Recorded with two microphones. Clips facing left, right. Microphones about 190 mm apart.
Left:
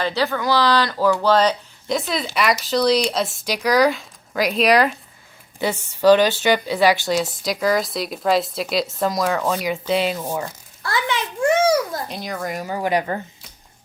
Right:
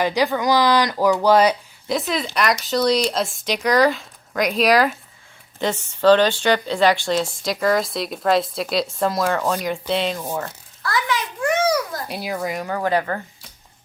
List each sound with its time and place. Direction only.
0.0 s speech: 15° right (ahead or behind)
2.0 s speech: centre (ahead or behind)
5.5 s speech: 10° left (ahead or behind)
10.8 s a sound: 25° left (ahead or behind)
12.0 s speech: 10° right (ahead or behind)
12.7 s speech: 15° left (ahead or behind)